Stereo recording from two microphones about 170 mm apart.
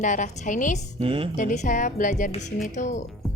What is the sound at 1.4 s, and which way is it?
A woman's voice, 50° left (ahead or behind).